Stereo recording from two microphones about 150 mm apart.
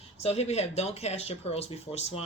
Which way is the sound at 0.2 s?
45° left (ahead or behind).